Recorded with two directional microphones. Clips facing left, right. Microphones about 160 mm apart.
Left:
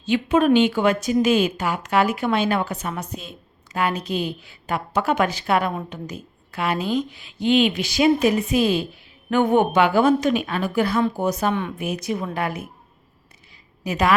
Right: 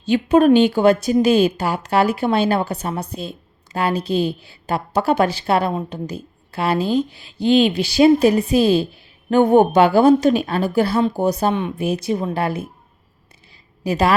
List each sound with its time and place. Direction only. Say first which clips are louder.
0.0 s a woman's voice: right 5 dB; 35° right (ahead or behind)
13.8 s a woman's voice: right 4 dB; 35° right (ahead or behind)